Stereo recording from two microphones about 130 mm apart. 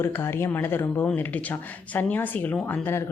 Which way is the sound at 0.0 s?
15° left (ahead or behind).